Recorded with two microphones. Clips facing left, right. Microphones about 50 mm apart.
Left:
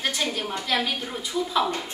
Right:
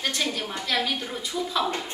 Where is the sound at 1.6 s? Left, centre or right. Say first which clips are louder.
Even; right.